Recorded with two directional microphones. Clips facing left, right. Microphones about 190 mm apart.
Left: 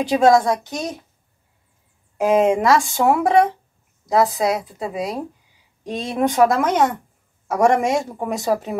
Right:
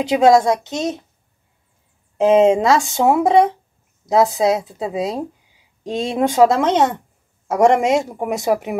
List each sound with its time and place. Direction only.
0.0 s speech: 20° right (ahead or behind)
2.1 s speech: 25° right (ahead or behind)